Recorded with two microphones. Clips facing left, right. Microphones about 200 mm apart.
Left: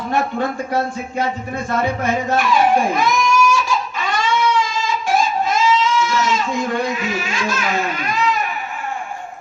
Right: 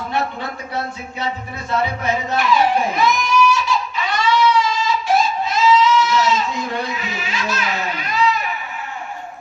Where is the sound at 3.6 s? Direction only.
45° left (ahead or behind).